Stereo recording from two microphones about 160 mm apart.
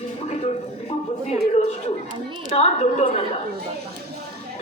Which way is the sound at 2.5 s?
40° left (ahead or behind).